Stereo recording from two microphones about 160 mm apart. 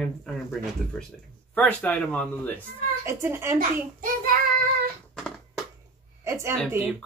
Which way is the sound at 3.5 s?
60° right (ahead or behind).